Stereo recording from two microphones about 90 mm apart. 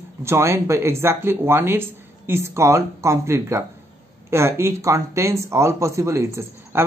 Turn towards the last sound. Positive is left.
turn(degrees=-25)  # may be behind; listen again after turning